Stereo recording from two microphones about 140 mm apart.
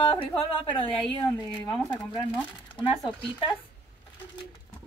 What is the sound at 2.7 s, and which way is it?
Speech, 35° left (ahead or behind).